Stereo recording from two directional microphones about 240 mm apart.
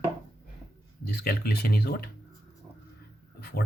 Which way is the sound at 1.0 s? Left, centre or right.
Left.